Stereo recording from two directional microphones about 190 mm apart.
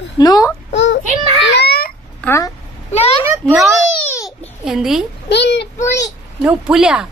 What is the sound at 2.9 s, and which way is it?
Speech, 35° left (ahead or behind).